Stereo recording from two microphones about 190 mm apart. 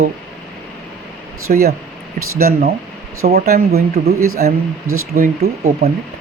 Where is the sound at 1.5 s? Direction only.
55° right (ahead or behind).